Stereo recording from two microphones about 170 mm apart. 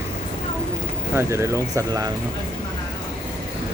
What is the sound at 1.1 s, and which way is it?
Speech, 15° right (ahead or behind).